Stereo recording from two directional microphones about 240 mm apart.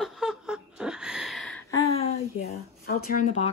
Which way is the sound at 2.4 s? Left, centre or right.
Left.